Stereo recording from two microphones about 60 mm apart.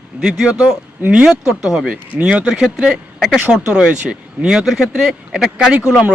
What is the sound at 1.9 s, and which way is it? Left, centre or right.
Speech, centre.